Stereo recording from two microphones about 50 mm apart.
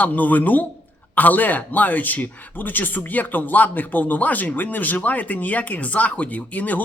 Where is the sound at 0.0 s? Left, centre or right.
Left.